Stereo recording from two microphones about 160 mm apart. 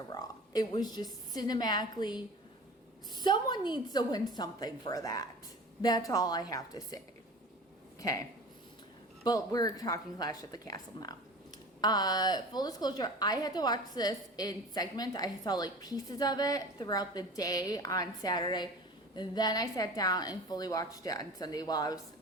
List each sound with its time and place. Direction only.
0.1 s a woman's voice: 25° left (ahead or behind)
9.2 s a woman's voice: 25° left (ahead or behind)